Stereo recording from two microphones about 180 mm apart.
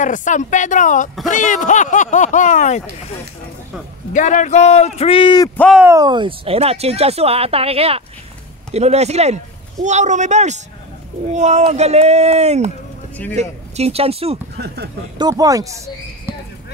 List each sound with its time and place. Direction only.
0.0 s speech: 45° left (ahead or behind)
4.1 s a man's voice: 45° left (ahead or behind); by 5.5 s 25° left (ahead or behind)
5.8 s speech: 15° right (ahead or behind); by 14.4 s 35° right (ahead or behind)
15.1 s speech: 20° right (ahead or behind)